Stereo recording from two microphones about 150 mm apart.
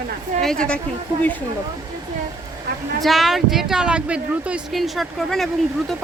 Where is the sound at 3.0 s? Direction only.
Centre (ahead or behind).